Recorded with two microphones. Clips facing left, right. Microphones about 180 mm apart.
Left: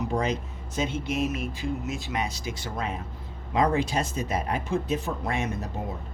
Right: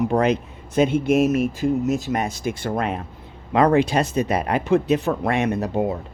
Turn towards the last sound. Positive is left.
turn(degrees=-70)  # may be behind; listen again after turning